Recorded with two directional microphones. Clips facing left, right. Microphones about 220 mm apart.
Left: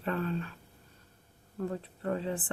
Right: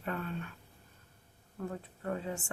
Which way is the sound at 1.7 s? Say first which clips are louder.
Left 3 dB; 35° left (ahead or behind).